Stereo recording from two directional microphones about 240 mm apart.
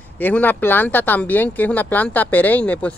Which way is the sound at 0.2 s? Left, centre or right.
Centre.